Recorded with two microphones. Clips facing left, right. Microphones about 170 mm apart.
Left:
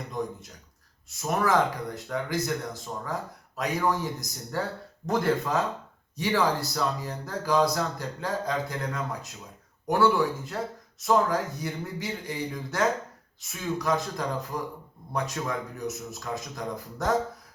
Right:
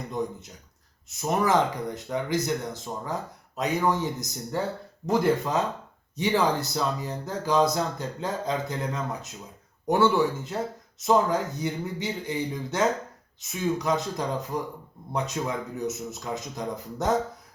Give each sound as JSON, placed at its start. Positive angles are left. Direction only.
{"t": 0.1, "sound": "speech", "side_deg": -20}